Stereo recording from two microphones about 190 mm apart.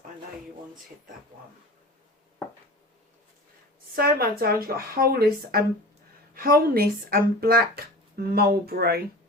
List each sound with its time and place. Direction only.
3.9 s speech: 50° right (ahead or behind)